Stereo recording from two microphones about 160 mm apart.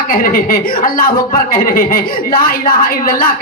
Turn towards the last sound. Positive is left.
turn(degrees=65)  # may be behind; listen again after turning